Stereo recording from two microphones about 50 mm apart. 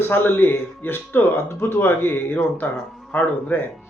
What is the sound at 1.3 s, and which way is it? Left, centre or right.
A man's voice, left.